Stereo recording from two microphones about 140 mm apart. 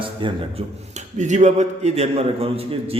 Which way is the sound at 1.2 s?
55° right (ahead or behind).